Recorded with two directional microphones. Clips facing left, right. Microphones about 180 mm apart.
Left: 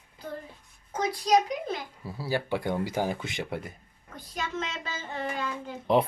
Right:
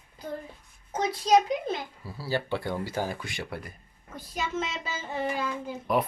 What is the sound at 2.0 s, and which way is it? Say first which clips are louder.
Speech: left 1 dB; 20° left (ahead or behind).